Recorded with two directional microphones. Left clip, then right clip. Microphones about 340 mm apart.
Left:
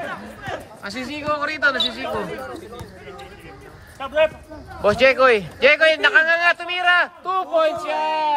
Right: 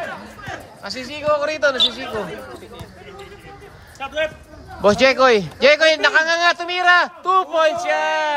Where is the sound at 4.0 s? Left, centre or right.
Left.